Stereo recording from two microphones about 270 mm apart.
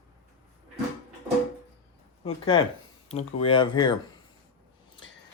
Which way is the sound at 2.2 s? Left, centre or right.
Centre.